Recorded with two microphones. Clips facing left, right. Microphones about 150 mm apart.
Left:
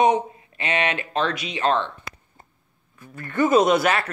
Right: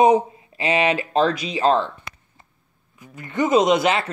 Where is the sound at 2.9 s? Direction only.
15° right (ahead or behind).